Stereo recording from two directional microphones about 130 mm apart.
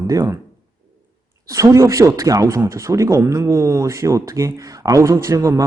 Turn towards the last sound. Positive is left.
turn(degrees=-25)  # may be behind; listen again after turning